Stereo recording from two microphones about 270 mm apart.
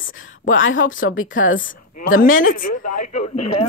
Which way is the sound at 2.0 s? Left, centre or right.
Left.